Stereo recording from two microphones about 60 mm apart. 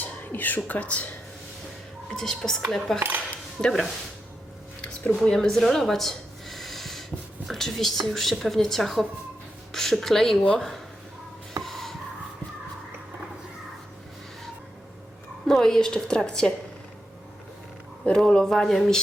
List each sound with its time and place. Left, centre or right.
0.0 s speech: left
2.0 s a woman's voice: centre
5.1 s a sound: centre
7.4 s a woman's voice: centre
11.6 s a sound: centre
15.4 s a woman's voice: centre
18.0 s a woman's voice: centre